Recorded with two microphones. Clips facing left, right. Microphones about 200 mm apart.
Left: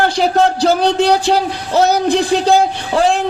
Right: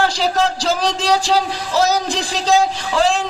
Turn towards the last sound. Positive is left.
turn(degrees=60)  # may be behind; listen again after turning